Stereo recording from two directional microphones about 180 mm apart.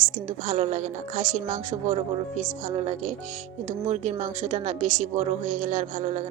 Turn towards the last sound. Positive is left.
turn(degrees=-45)  # may be behind; listen again after turning